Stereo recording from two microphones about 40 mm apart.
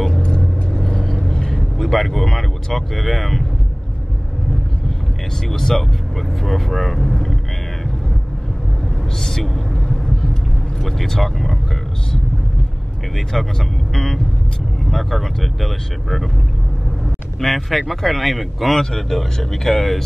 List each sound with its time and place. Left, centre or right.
0.2 s vehicle: left
0.7 s vehicle: centre
1.5 s speech: centre
5.5 s speech: centre
9.2 s vehicle: centre
10.8 s speech: centre
13.1 s speech: centre
17.4 s speech: centre
18.8 s speech: centre